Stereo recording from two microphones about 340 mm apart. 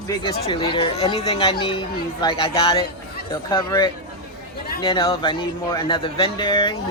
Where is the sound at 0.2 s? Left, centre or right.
Centre.